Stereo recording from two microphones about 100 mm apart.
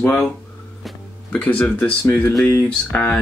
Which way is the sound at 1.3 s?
10° left (ahead or behind).